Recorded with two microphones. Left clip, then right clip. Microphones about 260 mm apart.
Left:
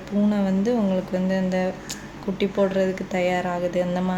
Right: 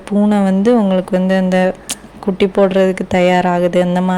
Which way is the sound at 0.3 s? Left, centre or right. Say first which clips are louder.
Right 11 dB; right.